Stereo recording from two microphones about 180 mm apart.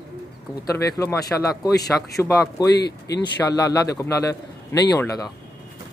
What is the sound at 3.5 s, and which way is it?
A man's voice, 20° left (ahead or behind).